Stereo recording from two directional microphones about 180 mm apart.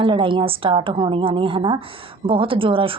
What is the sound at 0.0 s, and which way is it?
A woman's voice, 30° right (ahead or behind).